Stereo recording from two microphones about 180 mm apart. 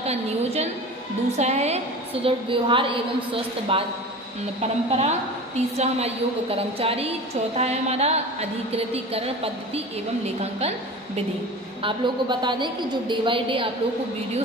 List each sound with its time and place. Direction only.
0.0 s a woman's voice: 35° right (ahead or behind)
11.8 s a woman's voice: 25° right (ahead or behind)